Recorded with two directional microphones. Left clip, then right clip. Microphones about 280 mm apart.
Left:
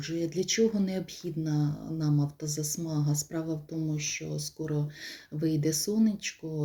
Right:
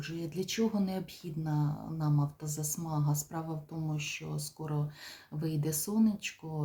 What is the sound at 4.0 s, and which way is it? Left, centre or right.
Speech, right.